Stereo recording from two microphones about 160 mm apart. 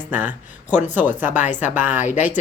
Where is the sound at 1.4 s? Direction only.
50° left (ahead or behind).